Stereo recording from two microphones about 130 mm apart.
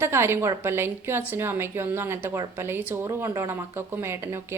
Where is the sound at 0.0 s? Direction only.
20° right (ahead or behind).